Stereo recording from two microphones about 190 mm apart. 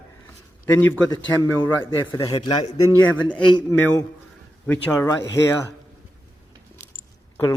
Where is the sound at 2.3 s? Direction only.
25° left (ahead or behind).